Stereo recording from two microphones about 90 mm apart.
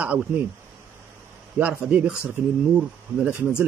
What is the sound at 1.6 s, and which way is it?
Speech, 15° right (ahead or behind).